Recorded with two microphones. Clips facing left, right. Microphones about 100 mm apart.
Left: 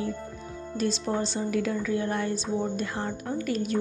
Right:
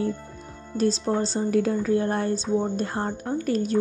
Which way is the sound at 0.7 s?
35° right (ahead or behind).